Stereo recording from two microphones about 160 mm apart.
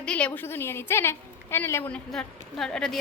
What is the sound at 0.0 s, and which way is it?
A woman's voice, 5° left (ahead or behind).